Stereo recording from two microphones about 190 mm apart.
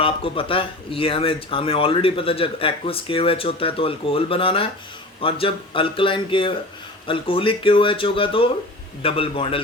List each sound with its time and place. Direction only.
0.0 s speech: 30° left (ahead or behind)